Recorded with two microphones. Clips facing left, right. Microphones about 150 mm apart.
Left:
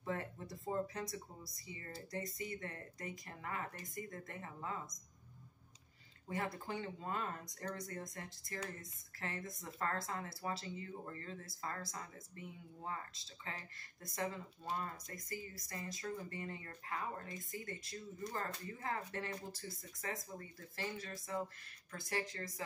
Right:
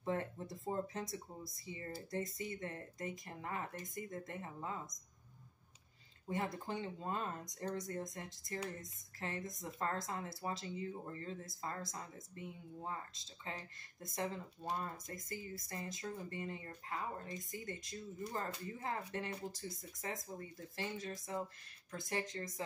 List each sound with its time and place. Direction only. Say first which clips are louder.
0.0 s speech: right 3 dB; 25° right (ahead or behind)
6.2 s speech: right 1 dB; 20° right (ahead or behind)